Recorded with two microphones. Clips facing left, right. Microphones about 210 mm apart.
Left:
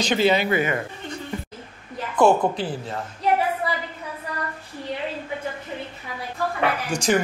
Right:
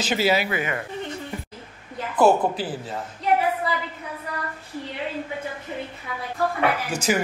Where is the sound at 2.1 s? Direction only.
5° right (ahead or behind).